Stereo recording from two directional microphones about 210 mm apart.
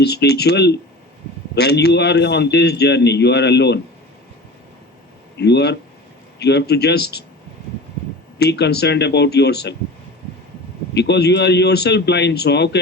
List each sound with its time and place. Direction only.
0.0 s a man's voice: 50° left (ahead or behind)
5.4 s a man's voice: 55° left (ahead or behind)
8.4 s a man's voice: 50° left (ahead or behind)
10.9 s a man's voice: 55° left (ahead or behind)